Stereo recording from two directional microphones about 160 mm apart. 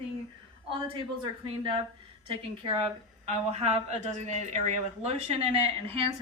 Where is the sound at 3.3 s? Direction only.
40° right (ahead or behind).